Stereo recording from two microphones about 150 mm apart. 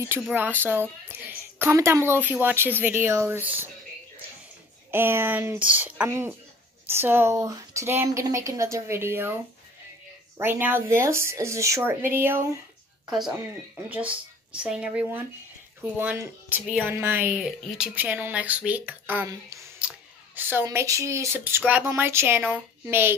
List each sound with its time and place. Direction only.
0.2 s speech: 10° right (ahead or behind)
4.9 s speech: 15° right (ahead or behind)
6.0 s speech: 20° right (ahead or behind)
13.8 s speech: 10° right (ahead or behind)